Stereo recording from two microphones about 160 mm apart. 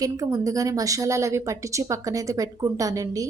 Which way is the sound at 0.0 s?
20° right (ahead or behind).